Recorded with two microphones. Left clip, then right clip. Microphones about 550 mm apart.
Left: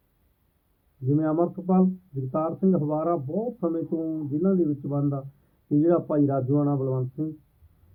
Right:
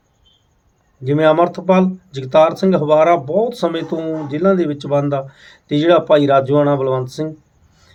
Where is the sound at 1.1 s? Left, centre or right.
Centre.